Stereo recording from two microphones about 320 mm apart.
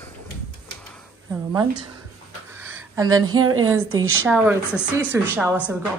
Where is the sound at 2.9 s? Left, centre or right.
Centre.